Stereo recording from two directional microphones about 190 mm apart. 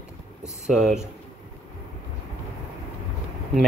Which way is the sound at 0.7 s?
5° right (ahead or behind).